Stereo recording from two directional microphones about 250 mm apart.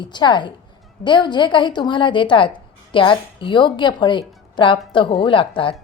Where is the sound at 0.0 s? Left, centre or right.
Centre.